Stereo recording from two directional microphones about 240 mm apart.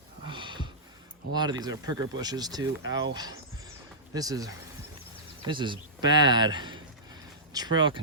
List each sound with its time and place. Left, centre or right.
0.3 s a sound: centre
1.3 s speech: centre
4.1 s speech: centre